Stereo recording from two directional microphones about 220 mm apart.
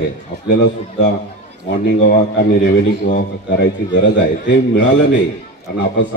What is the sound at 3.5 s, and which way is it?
A man's voice, 50° left (ahead or behind).